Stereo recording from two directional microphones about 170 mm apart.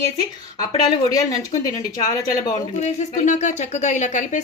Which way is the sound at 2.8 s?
45° left (ahead or behind).